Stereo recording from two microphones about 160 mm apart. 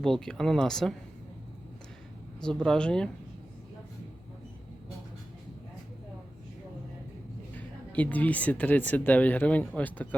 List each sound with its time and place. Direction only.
0.0 s speech: 5° left (ahead or behind)
2.4 s speech: 5° left (ahead or behind)
7.5 s speech: 10° left (ahead or behind)